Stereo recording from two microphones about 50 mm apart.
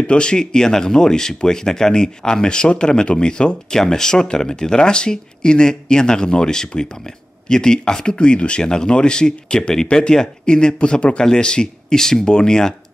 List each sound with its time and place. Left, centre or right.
0.0 s speech: centre